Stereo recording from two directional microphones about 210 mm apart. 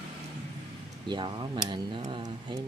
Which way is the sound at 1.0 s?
20° right (ahead or behind).